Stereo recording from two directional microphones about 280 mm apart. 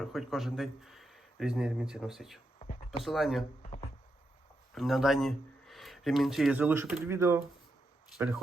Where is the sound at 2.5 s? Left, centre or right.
Left.